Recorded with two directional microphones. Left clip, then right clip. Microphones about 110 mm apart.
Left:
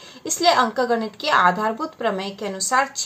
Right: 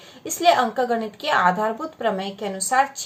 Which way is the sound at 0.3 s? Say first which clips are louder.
Even; 35° left (ahead or behind).